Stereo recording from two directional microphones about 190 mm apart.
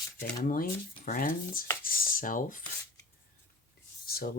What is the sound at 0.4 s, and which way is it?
Speech, 45° left (ahead or behind).